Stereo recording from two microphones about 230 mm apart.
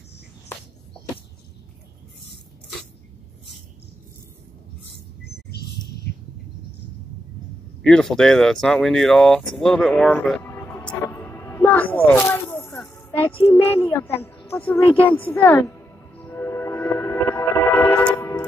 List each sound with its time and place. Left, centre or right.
5.2 s bird: left
7.8 s a sound: centre
13.5 s speech: centre
15.3 s music: centre